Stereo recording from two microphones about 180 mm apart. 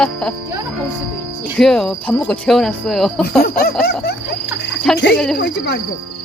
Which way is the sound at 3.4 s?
60° left (ahead or behind).